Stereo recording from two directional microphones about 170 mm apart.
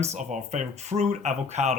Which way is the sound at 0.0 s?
40° right (ahead or behind).